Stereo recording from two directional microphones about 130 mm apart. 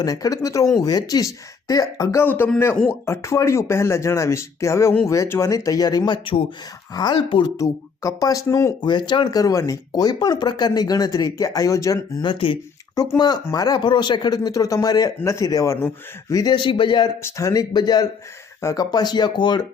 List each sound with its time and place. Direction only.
0.0 s speech: 30° left (ahead or behind)
2.2 s speech: 15° left (ahead or behind); by 7.5 s 35° left (ahead or behind)
7.5 s speech: 25° left (ahead or behind)
8.8 s speech: 35° left (ahead or behind)
12.2 s speech: 40° left (ahead or behind); by 15.9 s 20° left (ahead or behind)
16.3 s speech: 30° left (ahead or behind)
17.2 s speech: 25° left (ahead or behind)